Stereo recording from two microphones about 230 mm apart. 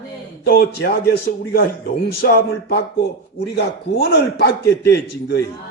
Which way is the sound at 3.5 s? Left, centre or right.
Left.